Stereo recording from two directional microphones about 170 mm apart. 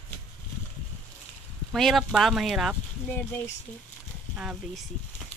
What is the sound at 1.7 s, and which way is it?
Speech, centre (ahead or behind).